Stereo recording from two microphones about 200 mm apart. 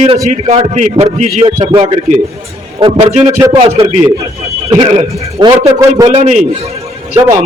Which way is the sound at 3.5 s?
30° right (ahead or behind).